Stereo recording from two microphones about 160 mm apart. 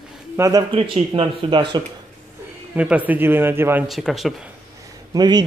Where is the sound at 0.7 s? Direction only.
35° right (ahead or behind).